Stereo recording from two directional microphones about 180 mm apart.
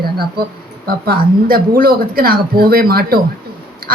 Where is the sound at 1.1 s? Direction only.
55° right (ahead or behind).